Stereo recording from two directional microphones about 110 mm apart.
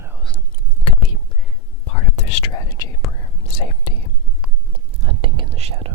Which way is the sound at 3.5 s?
50° left (ahead or behind).